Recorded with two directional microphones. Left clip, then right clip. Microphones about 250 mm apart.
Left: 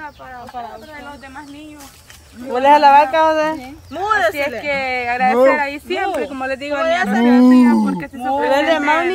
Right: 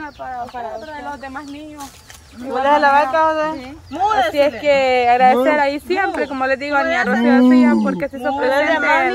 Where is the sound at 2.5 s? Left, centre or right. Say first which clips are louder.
Left 4 dB; left.